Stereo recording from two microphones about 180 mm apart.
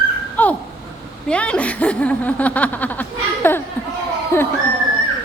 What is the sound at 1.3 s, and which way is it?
A child's voice, 5° left (ahead or behind).